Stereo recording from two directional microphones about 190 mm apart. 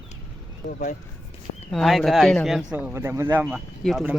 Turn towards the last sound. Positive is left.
turn(degrees=0)  # may be behind; listen again after turning